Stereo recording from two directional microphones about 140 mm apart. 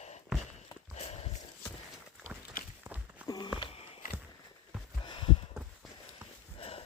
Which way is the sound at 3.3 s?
30° left (ahead or behind).